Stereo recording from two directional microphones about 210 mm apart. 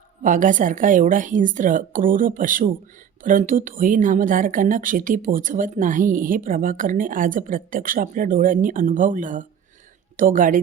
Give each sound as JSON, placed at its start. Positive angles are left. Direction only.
{"t": 0.2, "sound": "speech", "side_deg": -40}